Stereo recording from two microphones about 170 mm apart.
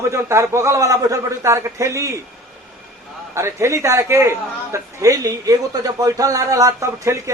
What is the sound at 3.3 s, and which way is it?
A man's voice, 15° right (ahead or behind).